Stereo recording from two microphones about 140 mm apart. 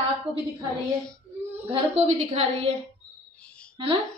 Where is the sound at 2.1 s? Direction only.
45° right (ahead or behind).